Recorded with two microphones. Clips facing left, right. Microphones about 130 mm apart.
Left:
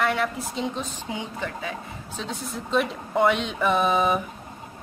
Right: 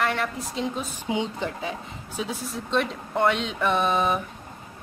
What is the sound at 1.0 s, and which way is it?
Speech, 20° right (ahead or behind).